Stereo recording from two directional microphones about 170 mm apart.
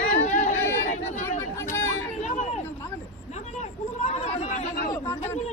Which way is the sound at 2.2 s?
45° left (ahead or behind).